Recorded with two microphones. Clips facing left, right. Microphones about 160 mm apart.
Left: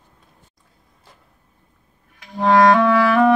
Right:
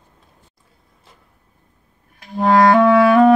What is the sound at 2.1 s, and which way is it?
Clarinet, 30° right (ahead or behind).